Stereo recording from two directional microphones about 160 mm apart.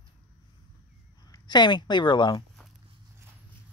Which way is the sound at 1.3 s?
25° left (ahead or behind).